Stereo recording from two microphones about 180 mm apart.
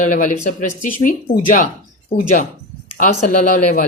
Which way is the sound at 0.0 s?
45° left (ahead or behind).